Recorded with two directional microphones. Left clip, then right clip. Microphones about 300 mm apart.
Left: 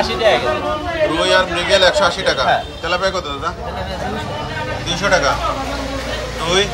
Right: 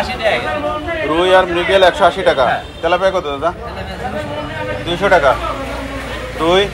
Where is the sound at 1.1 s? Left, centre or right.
Centre.